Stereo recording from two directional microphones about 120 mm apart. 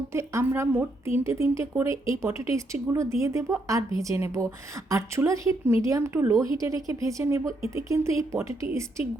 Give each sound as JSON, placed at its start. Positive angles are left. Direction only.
{"t": 0.1, "sound": "a woman's voice", "side_deg": -25}